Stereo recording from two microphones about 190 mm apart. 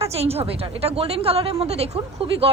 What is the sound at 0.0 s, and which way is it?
A woman's voice, 30° right (ahead or behind).